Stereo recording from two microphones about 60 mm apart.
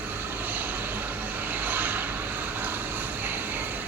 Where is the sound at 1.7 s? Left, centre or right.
Right.